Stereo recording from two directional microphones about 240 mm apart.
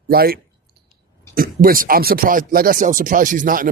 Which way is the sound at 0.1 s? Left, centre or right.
Right.